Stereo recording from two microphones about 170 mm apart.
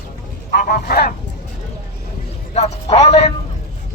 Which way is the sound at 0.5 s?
60° left (ahead or behind).